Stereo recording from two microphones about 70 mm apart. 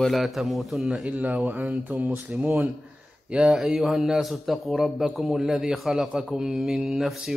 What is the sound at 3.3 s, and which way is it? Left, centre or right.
A man's voice, centre.